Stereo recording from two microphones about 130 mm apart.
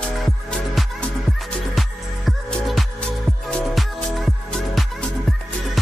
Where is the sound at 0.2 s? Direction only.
Centre (ahead or behind).